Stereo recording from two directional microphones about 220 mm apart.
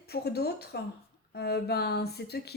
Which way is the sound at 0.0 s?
45° left (ahead or behind).